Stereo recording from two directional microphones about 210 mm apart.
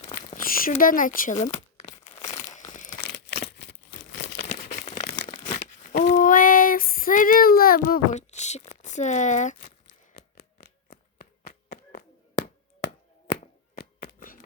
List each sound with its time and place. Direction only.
0.3 s crumpling: 40° left (ahead or behind)
3.1 s crumpling: 55° left (ahead or behind)
4.4 s crumpling: 35° left (ahead or behind)
5.5 s female singing: 35° left (ahead or behind)
10.2 s a sound: 40° left (ahead or behind)
13.3 s a sound: 40° left (ahead or behind)